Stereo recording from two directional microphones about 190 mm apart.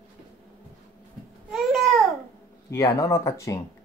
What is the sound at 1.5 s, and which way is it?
Babbling, centre (ahead or behind).